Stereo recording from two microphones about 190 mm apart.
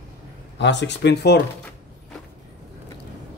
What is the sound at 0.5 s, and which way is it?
Speech, 65° left (ahead or behind).